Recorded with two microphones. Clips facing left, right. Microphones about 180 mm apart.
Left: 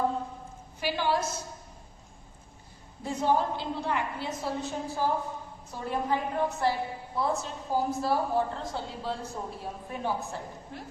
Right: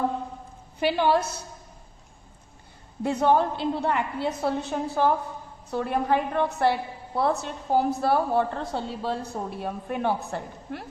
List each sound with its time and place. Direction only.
0.8 s a woman's voice: 60° right (ahead or behind)
3.0 s a woman's voice: 65° right (ahead or behind)